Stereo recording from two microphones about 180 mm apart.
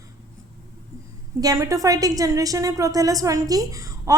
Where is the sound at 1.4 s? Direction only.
20° right (ahead or behind).